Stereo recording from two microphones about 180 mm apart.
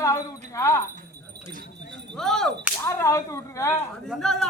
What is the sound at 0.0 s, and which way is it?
Speech, 15° left (ahead or behind).